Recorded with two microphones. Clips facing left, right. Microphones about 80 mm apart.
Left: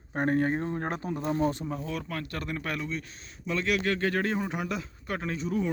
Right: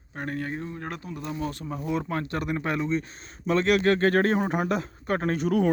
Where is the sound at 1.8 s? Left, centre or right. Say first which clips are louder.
Right 6 dB; right.